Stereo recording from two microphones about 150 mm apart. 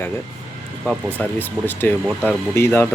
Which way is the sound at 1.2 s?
15° left (ahead or behind).